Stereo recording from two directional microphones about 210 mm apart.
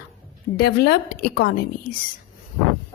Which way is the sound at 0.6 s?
50° left (ahead or behind).